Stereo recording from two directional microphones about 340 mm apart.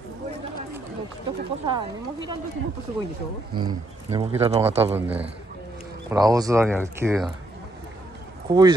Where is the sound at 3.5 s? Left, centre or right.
Centre.